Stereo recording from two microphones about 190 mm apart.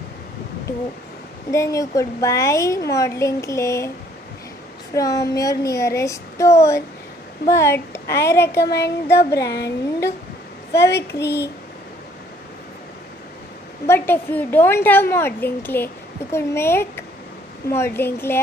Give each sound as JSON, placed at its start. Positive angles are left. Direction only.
{"t": 1.5, "sound": "a woman's voice", "side_deg": 15}
{"t": 4.9, "sound": "a woman's voice", "side_deg": 15}
{"t": 8.5, "sound": "child singing", "side_deg": 60}
{"t": 9.0, "sound": "a woman's voice", "side_deg": 15}
{"t": 10.7, "sound": "a woman's voice", "side_deg": 15}
{"t": 11.1, "sound": "child singing", "side_deg": 60}
{"t": 13.8, "sound": "a woman's voice", "side_deg": 10}